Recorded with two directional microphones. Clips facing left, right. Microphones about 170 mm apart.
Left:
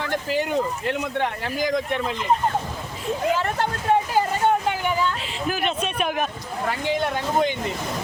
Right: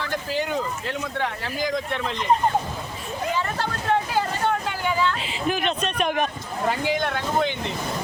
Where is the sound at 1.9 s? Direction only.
15° left (ahead or behind).